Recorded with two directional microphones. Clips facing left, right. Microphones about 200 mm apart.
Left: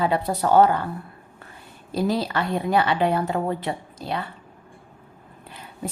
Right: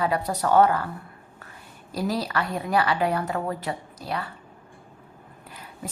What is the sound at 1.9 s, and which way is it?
Speech, 25° left (ahead or behind).